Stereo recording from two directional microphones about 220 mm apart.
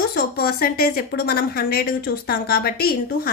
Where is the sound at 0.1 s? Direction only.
45° left (ahead or behind).